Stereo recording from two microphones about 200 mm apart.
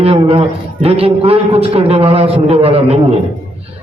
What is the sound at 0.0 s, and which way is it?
A man's voice, 30° right (ahead or behind).